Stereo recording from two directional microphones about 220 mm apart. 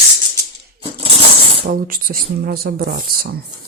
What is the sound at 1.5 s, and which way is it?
Speech, 35° right (ahead or behind).